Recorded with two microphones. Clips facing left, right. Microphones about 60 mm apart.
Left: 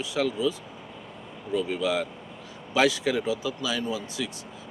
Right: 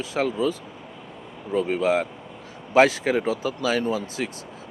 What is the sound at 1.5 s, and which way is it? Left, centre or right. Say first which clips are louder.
Speech: right 5 dB; right.